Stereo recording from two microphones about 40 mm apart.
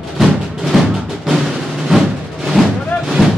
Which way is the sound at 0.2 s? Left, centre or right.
Centre.